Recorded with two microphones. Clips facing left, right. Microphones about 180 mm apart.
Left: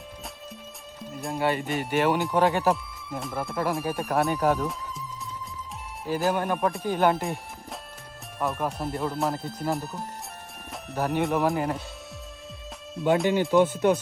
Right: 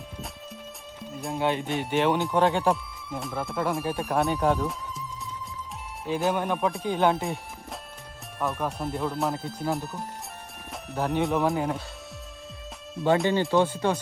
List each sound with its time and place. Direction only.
1.1 s speech: centre (ahead or behind)
6.1 s speech: centre (ahead or behind)
12.9 s speech: centre (ahead or behind)